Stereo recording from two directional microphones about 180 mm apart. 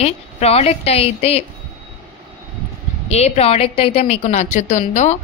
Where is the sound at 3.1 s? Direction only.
35° left (ahead or behind).